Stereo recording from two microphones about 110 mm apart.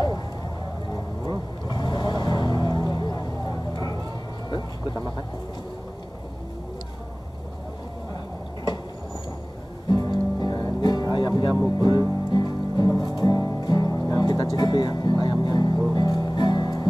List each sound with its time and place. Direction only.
1.7 s vehicle: 40° left (ahead or behind)
9.8 s music: 40° left (ahead or behind)